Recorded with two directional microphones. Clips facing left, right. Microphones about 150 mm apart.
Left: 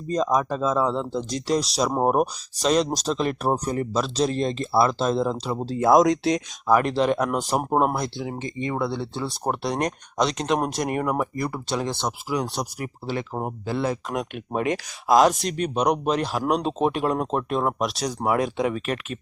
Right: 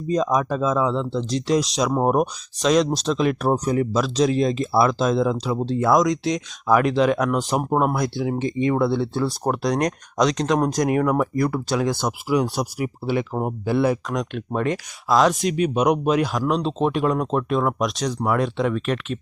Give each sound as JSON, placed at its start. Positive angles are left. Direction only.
{"t": 0.1, "sound": "speech", "side_deg": -5}
{"t": 5.8, "sound": "speech", "side_deg": 25}
{"t": 6.9, "sound": "speech", "side_deg": 0}
{"t": 8.4, "sound": "speech", "side_deg": -20}
{"t": 8.7, "sound": "speech", "side_deg": -10}
{"t": 14.1, "sound": "speech", "side_deg": 5}
{"t": 15.2, "sound": "speech", "side_deg": 0}
{"t": 16.4, "sound": "speech", "side_deg": 50}
{"t": 16.6, "sound": "speech", "side_deg": 5}